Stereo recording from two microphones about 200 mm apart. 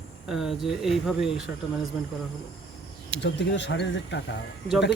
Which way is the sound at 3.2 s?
60° left (ahead or behind).